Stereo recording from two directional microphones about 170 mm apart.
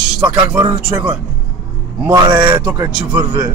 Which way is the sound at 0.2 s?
15° right (ahead or behind).